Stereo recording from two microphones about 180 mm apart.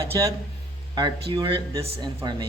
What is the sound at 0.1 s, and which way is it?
Speech, 20° right (ahead or behind).